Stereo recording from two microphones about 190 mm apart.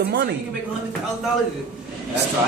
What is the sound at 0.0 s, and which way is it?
Speech, 60° right (ahead or behind).